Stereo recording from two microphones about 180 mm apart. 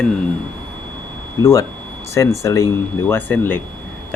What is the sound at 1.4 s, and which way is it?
Speech, 20° left (ahead or behind).